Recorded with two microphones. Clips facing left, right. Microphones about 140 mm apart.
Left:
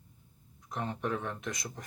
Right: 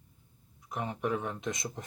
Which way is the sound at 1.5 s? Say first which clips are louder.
Right 3 dB; 25° right (ahead or behind).